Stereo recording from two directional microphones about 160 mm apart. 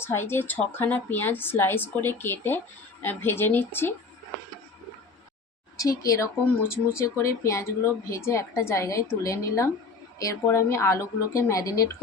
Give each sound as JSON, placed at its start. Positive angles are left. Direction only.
{"t": 0.0, "sound": "a woman's voice", "side_deg": 15}
{"t": 5.7, "sound": "a woman's voice", "side_deg": 20}